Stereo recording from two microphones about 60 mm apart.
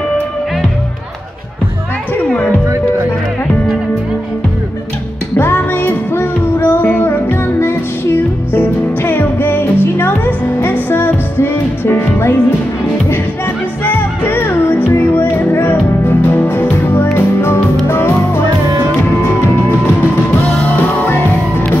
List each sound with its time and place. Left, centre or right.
5.4 s music: left
13.8 s music: left
20.7 s music: left